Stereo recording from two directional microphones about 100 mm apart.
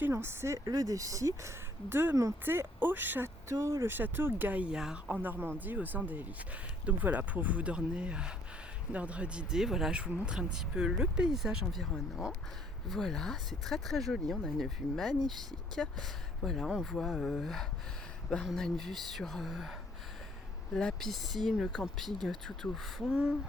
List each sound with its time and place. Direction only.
0.0 s speech: 25° right (ahead or behind)
0.6 s speech: 40° right (ahead or behind); by 3.2 s 20° right (ahead or behind)
3.5 s speech: 30° right (ahead or behind); by 19.7 s centre (ahead or behind)
20.7 s speech: 5° left (ahead or behind)